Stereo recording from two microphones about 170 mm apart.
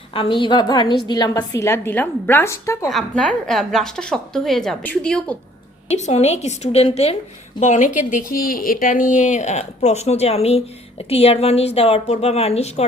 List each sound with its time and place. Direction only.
0.1 s a woman's voice: 30° left (ahead or behind)
2.9 s a woman's voice: 5° left (ahead or behind)
5.9 s speech: 40° left (ahead or behind)